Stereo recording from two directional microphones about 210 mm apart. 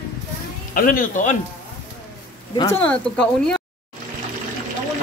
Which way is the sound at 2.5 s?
15° left (ahead or behind).